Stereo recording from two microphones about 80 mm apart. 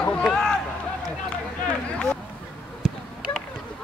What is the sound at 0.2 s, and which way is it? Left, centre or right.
Run, centre.